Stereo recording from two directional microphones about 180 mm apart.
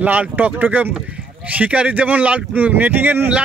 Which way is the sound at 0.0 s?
10° right (ahead or behind).